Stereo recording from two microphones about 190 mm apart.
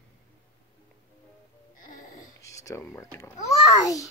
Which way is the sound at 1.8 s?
45° left (ahead or behind).